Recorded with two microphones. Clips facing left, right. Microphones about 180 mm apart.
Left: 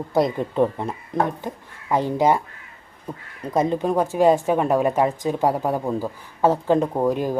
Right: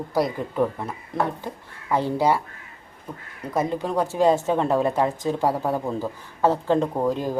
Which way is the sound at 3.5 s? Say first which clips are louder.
Left 4 dB; 20° left (ahead or behind).